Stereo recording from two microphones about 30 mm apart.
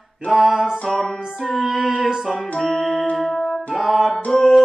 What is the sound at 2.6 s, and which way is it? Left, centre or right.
Music, centre.